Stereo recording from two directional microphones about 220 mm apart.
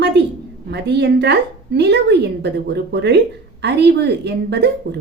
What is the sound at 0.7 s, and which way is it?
A woman's voice, 50° right (ahead or behind).